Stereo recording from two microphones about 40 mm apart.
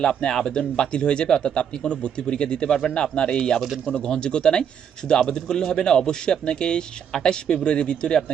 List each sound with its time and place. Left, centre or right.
0.0 s a man's voice: centre